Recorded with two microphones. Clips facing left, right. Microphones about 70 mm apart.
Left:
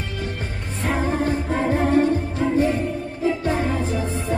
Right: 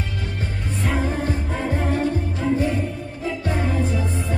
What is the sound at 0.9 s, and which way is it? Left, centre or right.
Music, left.